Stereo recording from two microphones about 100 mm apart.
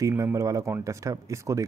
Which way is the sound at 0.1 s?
30° right (ahead or behind).